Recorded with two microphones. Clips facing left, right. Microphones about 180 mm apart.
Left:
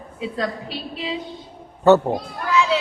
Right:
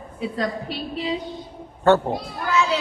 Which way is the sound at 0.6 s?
40° right (ahead or behind).